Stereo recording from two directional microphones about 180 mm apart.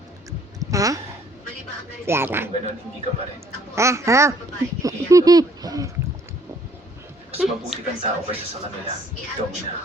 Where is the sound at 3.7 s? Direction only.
15° right (ahead or behind).